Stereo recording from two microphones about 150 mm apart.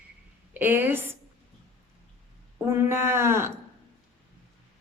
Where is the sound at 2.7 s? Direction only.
15° right (ahead or behind).